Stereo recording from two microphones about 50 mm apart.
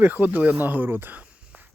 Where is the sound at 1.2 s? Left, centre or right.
Right.